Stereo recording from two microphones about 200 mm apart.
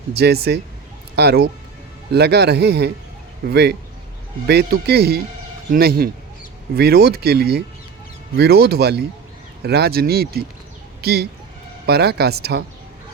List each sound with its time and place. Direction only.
0.1 s speech: 55° right (ahead or behind)